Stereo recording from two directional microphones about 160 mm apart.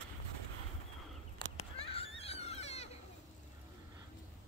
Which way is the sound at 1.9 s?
35° left (ahead or behind).